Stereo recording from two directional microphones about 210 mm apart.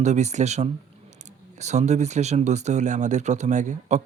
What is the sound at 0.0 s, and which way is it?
Speech, 35° right (ahead or behind).